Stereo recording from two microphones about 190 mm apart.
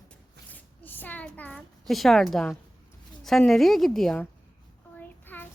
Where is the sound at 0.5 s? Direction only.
10° left (ahead or behind).